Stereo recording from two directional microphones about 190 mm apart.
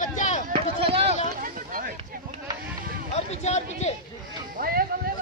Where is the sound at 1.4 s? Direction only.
45° right (ahead or behind).